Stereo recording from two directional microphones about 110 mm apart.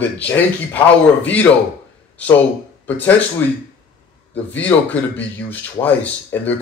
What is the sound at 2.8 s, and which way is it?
Speech, 15° left (ahead or behind).